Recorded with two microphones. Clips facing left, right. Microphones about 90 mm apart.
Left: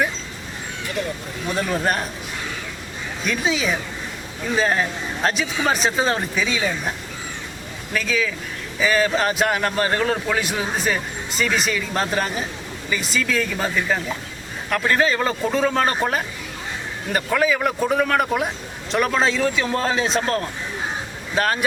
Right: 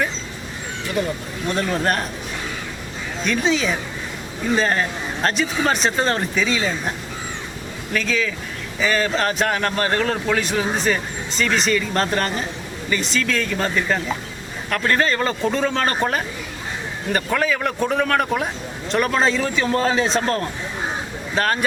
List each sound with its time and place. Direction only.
1.0 s speech: 15° right (ahead or behind)
1.5 s speech: 5° left (ahead or behind)
3.2 s speech: 5° left (ahead or behind)
7.9 s speech: 5° left (ahead or behind)